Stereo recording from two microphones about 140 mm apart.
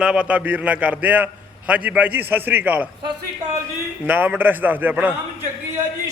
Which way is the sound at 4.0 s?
10° right (ahead or behind).